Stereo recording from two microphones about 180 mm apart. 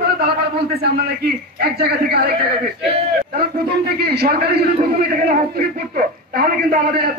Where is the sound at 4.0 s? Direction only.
60° right (ahead or behind).